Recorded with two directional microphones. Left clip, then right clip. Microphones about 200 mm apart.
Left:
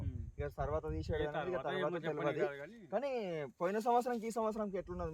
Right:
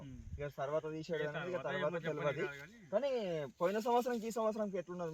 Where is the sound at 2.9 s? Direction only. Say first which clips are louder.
Right 2 dB; 10° left (ahead or behind).